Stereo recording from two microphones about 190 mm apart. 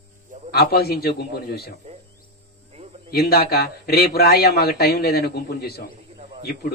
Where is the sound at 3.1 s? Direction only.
55° left (ahead or behind).